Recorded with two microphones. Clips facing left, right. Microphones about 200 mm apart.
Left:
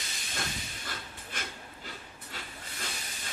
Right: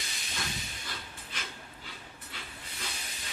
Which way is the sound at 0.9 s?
50° left (ahead or behind).